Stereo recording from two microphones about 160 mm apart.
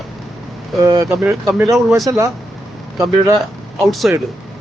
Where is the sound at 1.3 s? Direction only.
20° right (ahead or behind).